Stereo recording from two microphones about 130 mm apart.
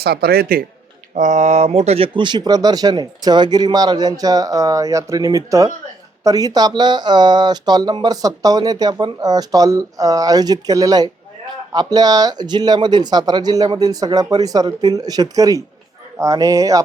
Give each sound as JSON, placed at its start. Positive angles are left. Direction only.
{"t": 1.1, "sound": "speech", "side_deg": -65}
{"t": 2.1, "sound": "speech", "side_deg": -35}